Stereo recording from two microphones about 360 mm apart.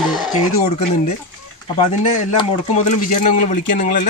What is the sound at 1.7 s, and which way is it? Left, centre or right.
Speech, centre.